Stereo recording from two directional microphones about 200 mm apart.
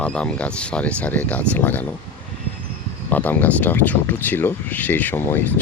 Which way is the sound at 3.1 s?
10° left (ahead or behind).